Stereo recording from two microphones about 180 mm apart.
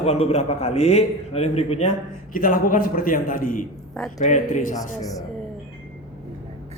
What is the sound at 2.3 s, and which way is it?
A man's voice, 50° left (ahead or behind).